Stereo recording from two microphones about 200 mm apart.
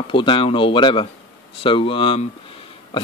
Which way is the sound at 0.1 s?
25° left (ahead or behind).